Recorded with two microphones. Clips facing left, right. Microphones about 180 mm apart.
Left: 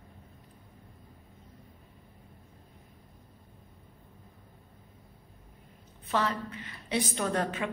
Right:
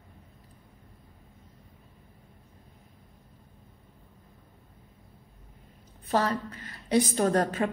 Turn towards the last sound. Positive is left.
turn(degrees=-40)  # may be behind; listen again after turning